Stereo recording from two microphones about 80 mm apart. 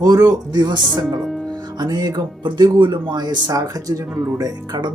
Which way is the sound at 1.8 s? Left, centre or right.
Right.